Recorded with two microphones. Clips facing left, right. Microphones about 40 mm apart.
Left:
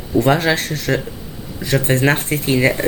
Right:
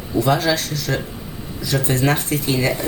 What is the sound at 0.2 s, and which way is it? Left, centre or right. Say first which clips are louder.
Speech: left 3 dB; left.